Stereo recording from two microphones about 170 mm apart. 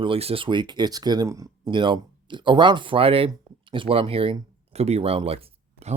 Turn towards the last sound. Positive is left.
turn(degrees=-35)  # may be behind; listen again after turning